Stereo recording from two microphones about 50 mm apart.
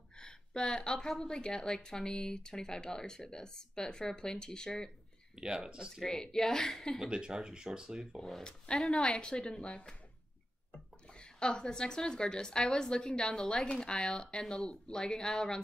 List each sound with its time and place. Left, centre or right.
0.2 s a sound: centre
1.0 s a woman's voice: centre
5.3 s speech: centre
6.0 s a woman's voice: centre
7.1 s speech: centre
8.2 s speech: centre
8.9 s a woman's voice: centre